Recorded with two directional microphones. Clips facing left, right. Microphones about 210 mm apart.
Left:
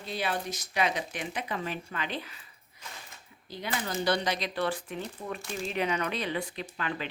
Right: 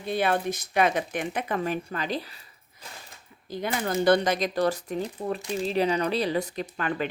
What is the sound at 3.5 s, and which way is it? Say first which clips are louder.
A woman's voice: right 6 dB; 50° right (ahead or behind).